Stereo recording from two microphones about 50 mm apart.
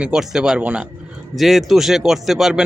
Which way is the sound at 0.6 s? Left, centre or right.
Right.